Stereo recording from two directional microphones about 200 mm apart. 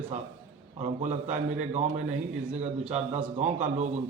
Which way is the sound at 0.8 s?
35° right (ahead or behind).